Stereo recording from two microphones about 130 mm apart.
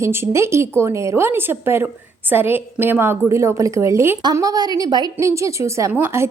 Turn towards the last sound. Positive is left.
turn(degrees=-20)  # may be behind; listen again after turning